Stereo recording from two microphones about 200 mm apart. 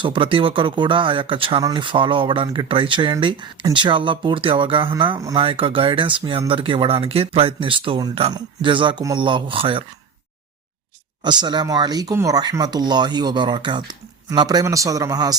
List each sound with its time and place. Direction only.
0.0 s speech: 25° right (ahead or behind)
11.2 s speech: 20° right (ahead or behind)